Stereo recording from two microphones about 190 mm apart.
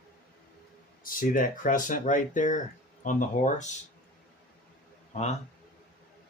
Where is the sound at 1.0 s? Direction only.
45° left (ahead or behind).